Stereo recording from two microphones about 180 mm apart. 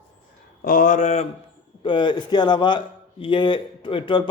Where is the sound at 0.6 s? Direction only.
50° left (ahead or behind).